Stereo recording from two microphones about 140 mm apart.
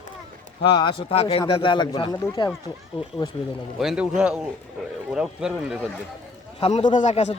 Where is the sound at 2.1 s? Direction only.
20° left (ahead or behind).